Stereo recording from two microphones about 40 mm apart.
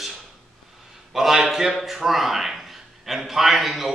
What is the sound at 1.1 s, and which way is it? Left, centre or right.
A man's voice, centre.